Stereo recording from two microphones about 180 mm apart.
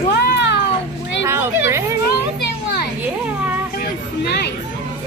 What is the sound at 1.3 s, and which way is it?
Speech, 15° right (ahead or behind).